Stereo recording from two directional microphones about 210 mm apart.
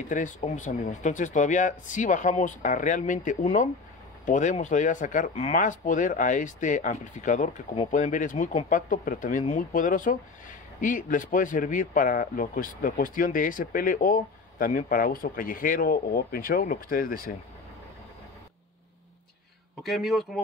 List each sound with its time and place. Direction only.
0.1 s a man's voice: 35° left (ahead or behind)
19.8 s speech: centre (ahead or behind)